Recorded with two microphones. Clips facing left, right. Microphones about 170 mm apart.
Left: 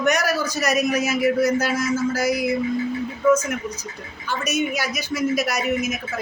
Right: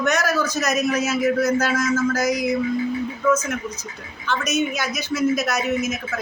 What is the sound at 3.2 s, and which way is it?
Speech, 30° left (ahead or behind).